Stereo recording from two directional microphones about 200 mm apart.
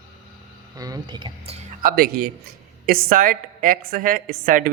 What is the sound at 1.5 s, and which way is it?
A woman's voice, 45° right (ahead or behind).